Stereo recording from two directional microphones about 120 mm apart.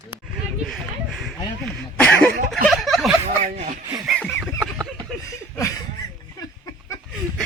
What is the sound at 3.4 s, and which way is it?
Speech, 90° right.